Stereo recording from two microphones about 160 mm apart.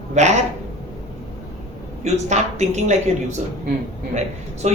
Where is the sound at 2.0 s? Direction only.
45° right (ahead or behind).